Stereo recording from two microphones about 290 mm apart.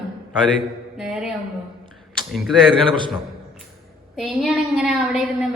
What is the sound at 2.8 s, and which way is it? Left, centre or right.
Speech, centre.